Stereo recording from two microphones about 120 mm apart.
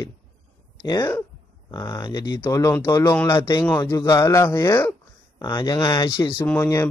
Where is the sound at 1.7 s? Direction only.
35° left (ahead or behind).